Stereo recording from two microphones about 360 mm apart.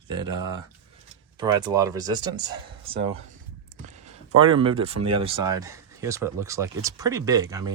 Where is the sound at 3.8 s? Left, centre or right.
Centre.